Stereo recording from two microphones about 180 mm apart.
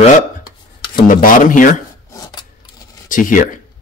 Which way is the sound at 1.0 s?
50° left (ahead or behind).